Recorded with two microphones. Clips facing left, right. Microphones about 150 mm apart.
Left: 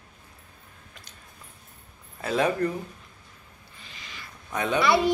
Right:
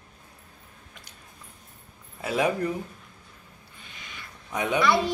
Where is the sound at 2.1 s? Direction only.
10° right (ahead or behind).